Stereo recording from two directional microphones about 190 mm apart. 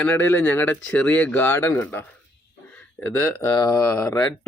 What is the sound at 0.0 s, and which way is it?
Speech, 10° left (ahead or behind).